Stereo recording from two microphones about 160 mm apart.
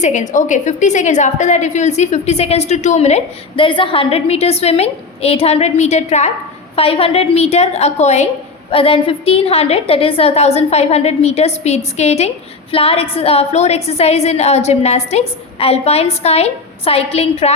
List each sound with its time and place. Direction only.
0.0 s a woman's voice: 50° left (ahead or behind)